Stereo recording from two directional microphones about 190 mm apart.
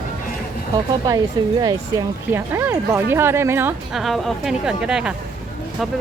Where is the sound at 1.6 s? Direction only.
15° right (ahead or behind).